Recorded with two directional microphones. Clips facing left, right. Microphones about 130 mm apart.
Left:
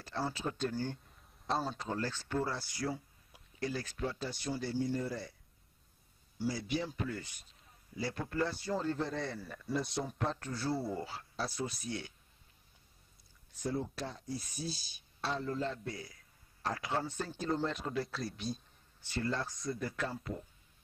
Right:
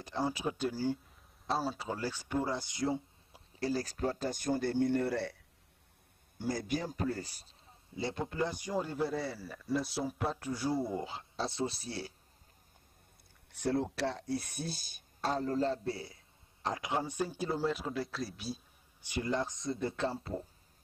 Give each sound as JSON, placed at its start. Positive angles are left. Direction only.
{"t": 0.0, "sound": "a man's voice", "side_deg": -15}
{"t": 3.6, "sound": "speech", "side_deg": -35}
{"t": 6.3, "sound": "speech", "side_deg": -50}
{"t": 8.0, "sound": "speech", "side_deg": -20}
{"t": 13.5, "sound": "speech", "side_deg": -70}
{"t": 16.6, "sound": "speech", "side_deg": -20}